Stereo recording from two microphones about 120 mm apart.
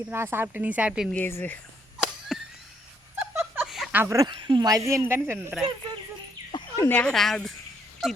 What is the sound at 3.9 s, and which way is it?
Speech, 25° right (ahead or behind).